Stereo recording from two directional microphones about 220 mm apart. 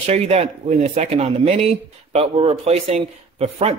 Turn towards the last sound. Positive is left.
turn(degrees=-25)  # may be behind; listen again after turning